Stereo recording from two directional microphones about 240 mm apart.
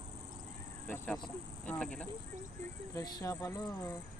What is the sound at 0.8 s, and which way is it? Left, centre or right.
Speech, centre.